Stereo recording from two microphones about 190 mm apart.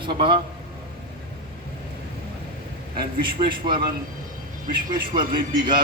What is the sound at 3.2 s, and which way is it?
Speech, 25° right (ahead or behind).